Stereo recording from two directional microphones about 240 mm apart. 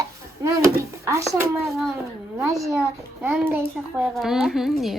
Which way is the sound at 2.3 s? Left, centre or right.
Centre.